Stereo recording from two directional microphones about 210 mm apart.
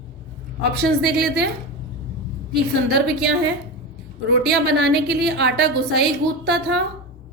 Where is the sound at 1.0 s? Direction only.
50° right (ahead or behind).